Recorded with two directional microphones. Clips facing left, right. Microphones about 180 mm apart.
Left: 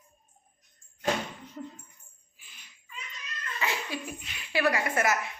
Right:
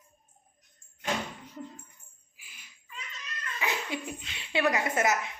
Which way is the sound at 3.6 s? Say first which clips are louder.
Even; 20° right (ahead or behind).